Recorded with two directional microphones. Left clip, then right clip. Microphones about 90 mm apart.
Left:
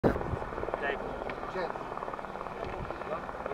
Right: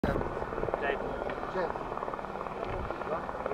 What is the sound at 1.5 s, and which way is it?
Helicopter, 35° left (ahead or behind).